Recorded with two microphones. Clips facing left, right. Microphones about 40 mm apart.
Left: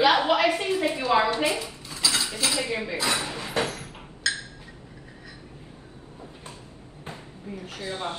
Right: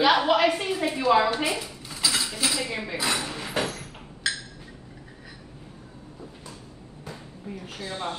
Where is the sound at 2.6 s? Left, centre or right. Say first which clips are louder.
Left 2 dB; left.